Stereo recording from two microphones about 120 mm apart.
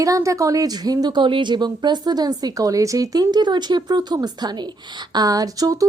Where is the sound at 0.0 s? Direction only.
25° right (ahead or behind).